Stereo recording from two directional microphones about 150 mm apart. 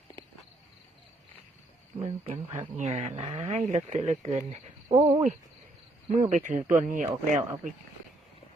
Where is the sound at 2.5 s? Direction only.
50° right (ahead or behind).